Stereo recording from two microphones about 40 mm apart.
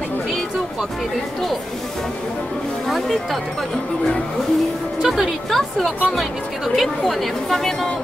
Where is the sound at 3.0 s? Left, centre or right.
Centre.